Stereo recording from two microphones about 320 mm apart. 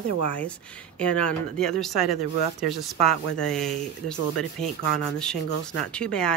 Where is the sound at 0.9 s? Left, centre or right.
Centre.